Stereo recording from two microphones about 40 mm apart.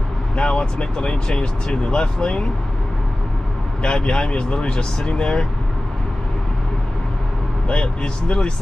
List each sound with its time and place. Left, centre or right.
0.4 s speech: left
3.8 s speech: left
7.6 s speech: left